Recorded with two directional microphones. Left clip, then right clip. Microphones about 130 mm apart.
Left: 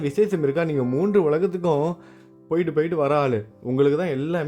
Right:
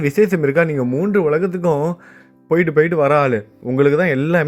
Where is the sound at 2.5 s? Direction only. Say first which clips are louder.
Right 8 dB; 25° right (ahead or behind).